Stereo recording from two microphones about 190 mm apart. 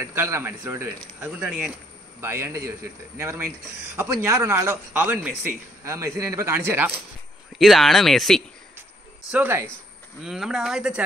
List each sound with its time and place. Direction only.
0.0 s speech: 15° right (ahead or behind)
5.0 s speech: 5° right (ahead or behind)
7.5 s speech: centre (ahead or behind)
9.3 s speech: 10° right (ahead or behind)